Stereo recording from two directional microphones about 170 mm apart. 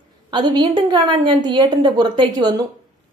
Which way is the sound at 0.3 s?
25° right (ahead or behind).